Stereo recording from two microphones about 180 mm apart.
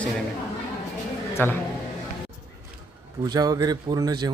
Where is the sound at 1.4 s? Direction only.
10° left (ahead or behind).